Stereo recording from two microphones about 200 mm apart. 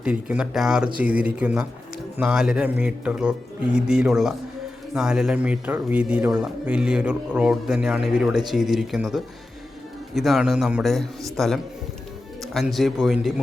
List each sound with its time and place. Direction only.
0.0 s a man's voice: 5° right (ahead or behind)